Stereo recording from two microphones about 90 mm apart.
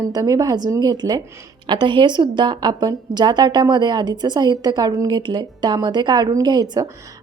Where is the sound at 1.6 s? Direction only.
60° right (ahead or behind); by 5.1 s 40° right (ahead or behind).